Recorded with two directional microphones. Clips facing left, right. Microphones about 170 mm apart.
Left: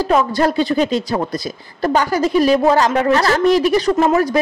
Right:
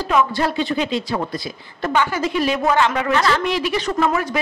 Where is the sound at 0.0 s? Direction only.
40° left (ahead or behind).